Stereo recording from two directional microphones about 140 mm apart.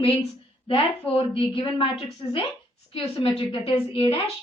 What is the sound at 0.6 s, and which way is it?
A woman's voice, 40° left (ahead or behind).